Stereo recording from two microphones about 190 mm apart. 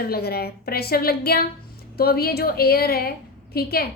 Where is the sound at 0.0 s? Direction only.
55° left (ahead or behind).